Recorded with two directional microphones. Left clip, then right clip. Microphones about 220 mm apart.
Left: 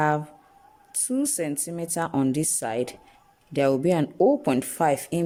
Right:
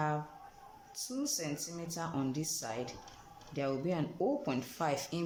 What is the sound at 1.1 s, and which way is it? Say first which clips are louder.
Speech: left 11 dB; 45° left (ahead or behind).